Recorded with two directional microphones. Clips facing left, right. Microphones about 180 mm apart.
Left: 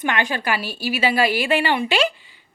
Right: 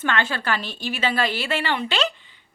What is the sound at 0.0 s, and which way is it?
A woman's voice, 15° left (ahead or behind).